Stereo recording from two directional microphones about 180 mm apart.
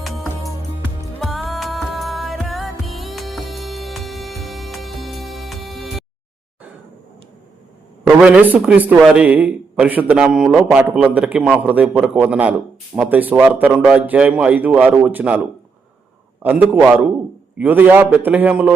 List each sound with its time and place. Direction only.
0.0 s music: centre (ahead or behind)
8.2 s a man's voice: 10° right (ahead or behind)